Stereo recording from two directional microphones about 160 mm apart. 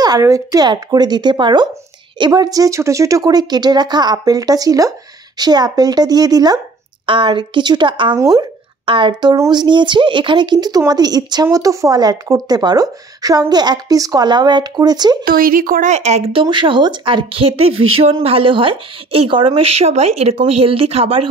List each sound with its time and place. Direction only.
0.0 s speech: 20° right (ahead or behind)
15.2 s speech: 65° right (ahead or behind); by 21.3 s 35° right (ahead or behind)